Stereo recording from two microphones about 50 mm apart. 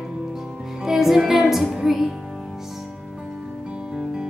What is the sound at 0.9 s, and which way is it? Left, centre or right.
Music, centre.